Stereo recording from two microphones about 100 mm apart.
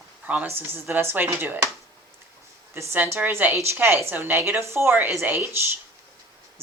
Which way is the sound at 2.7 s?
25° right (ahead or behind).